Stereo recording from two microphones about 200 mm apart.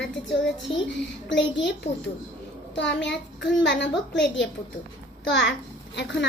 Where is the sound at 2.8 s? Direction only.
60° left (ahead or behind).